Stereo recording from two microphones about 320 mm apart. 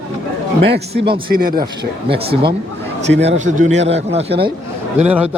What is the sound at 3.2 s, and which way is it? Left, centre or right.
Speech, right.